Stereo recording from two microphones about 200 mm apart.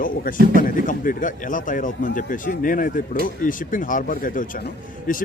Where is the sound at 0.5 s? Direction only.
40° left (ahead or behind).